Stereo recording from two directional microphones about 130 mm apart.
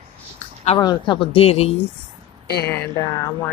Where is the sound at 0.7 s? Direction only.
35° left (ahead or behind); by 1.7 s 50° left (ahead or behind).